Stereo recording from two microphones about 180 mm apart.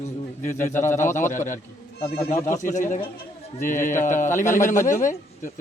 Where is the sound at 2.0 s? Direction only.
30° left (ahead or behind).